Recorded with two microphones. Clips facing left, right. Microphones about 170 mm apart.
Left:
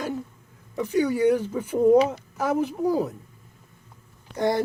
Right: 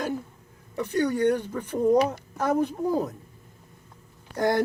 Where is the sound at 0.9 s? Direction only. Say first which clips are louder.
Left 2 dB; 5° left (ahead or behind).